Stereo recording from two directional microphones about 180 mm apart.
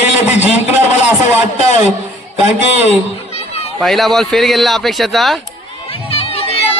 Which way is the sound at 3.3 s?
35° left (ahead or behind).